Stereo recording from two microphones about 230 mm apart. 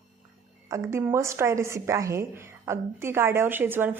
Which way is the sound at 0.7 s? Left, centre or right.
Centre.